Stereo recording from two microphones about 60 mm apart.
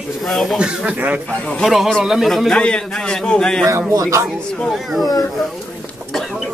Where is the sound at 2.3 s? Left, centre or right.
Centre.